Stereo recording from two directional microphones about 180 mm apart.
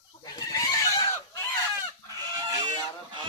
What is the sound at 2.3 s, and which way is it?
Goose, 20° right (ahead or behind).